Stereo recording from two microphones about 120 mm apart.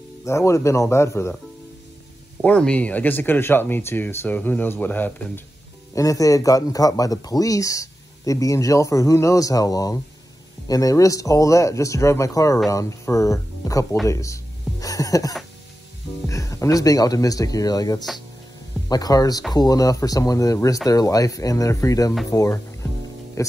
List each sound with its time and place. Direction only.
0.2 s a man's voice: 25° left (ahead or behind)
2.4 s speech: 10° left (ahead or behind)
5.9 s a man's voice: 30° left (ahead or behind)
14.0 s music: 25° left (ahead or behind)
16.3 s a man's voice: 25° left (ahead or behind)